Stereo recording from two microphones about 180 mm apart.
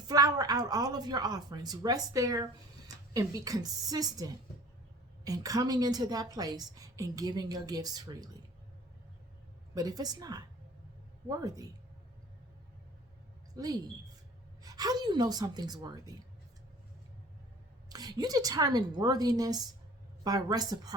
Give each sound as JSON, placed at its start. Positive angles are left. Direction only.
{"t": 0.1, "sound": "a woman's voice", "side_deg": -20}
{"t": 9.7, "sound": "a woman's voice", "side_deg": -20}
{"t": 13.5, "sound": "a woman's voice", "side_deg": -20}
{"t": 17.8, "sound": "a woman's voice", "side_deg": -20}